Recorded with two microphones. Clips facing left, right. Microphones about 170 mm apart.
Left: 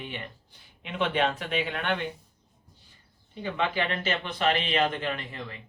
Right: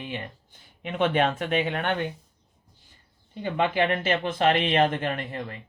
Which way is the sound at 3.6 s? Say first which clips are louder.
Right 5 dB; 50° right (ahead or behind).